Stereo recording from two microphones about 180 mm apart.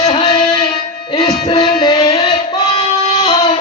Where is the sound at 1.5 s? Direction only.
25° left (ahead or behind).